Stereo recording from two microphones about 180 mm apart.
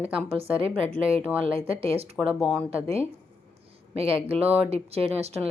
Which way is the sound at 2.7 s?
35° right (ahead or behind).